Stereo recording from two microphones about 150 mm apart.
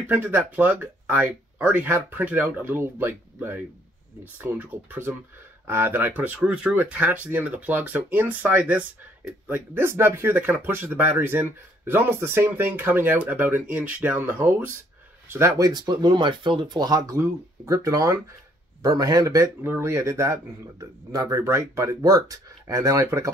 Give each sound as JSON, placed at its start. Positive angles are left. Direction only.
{"t": 0.0, "sound": "speech", "side_deg": -15}